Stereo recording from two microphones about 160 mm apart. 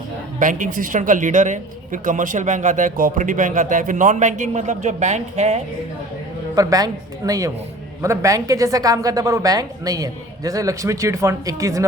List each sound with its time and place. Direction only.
0.3 s speech: 55° right (ahead or behind)
6.6 s speech: 20° right (ahead or behind)